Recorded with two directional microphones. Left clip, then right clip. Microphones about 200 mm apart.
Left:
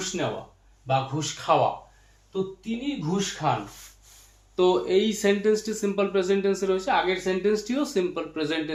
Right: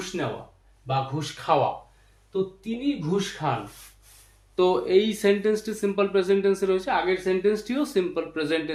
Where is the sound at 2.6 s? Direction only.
20° right (ahead or behind).